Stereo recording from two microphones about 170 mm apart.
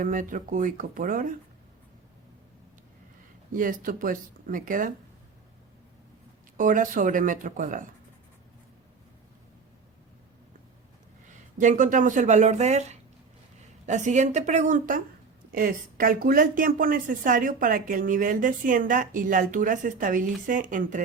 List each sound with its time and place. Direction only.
0.0 s a woman's voice: 50° right (ahead or behind)
3.5 s a woman's voice: 55° right (ahead or behind)
6.6 s a woman's voice: 50° right (ahead or behind)
11.5 s a woman's voice: 50° right (ahead or behind)